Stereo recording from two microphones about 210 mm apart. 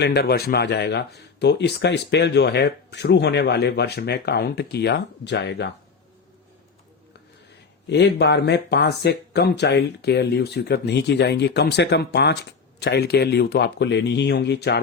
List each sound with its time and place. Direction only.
0.0 s speech: 50° left (ahead or behind)
7.9 s speech: 55° left (ahead or behind)